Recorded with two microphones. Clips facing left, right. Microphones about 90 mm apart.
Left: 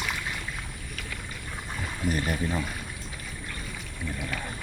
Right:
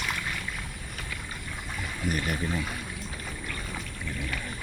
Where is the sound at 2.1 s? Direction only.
30° left (ahead or behind).